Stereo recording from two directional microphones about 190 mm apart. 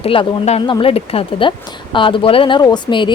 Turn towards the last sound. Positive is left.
turn(degrees=25)  # may be behind; listen again after turning